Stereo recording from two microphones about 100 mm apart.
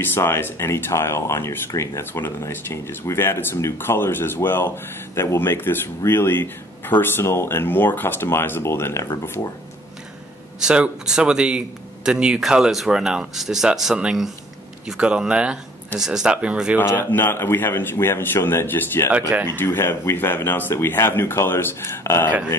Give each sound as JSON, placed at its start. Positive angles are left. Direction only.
{"t": 0.0, "sound": "speech", "side_deg": 25}
{"t": 10.6, "sound": "a man's voice", "side_deg": -10}
{"t": 16.7, "sound": "speech", "side_deg": 20}